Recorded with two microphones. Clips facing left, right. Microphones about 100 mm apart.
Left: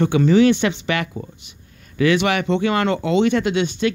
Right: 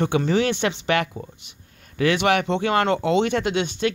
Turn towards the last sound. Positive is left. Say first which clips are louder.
# left 3 dB
turn(degrees=-55)  # may be behind; listen again after turning